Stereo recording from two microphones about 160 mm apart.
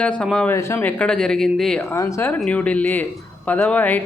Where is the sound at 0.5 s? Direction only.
15° left (ahead or behind).